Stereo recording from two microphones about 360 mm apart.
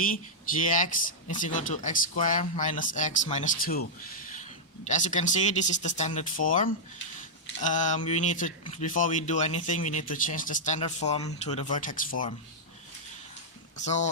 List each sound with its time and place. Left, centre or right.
0.6 s speech: left
13.7 s speech: centre